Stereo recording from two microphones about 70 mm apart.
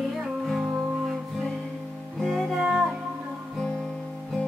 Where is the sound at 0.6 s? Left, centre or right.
Centre.